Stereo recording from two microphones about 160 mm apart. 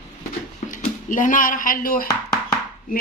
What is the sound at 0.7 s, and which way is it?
A woman's voice, 55° left (ahead or behind).